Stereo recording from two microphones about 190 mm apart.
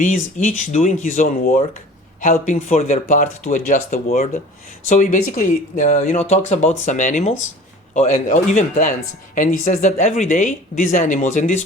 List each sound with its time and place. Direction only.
0.0 s speech: 40° left (ahead or behind)